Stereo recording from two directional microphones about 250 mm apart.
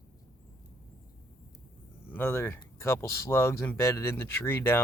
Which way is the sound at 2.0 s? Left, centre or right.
Centre.